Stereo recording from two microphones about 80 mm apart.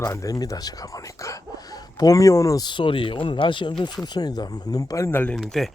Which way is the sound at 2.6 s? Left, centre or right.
Left.